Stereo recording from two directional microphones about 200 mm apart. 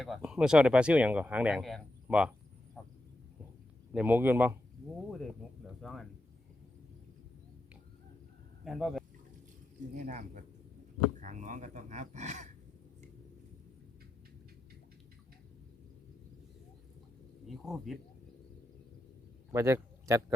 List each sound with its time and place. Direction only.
0.0 s speech: centre (ahead or behind)
3.9 s speech: 10° right (ahead or behind)
5.8 s speech: centre (ahead or behind)
8.6 s speech: centre (ahead or behind)
9.9 s speech: 40° right (ahead or behind)
17.4 s speech: centre (ahead or behind)
19.5 s speech: 15° right (ahead or behind)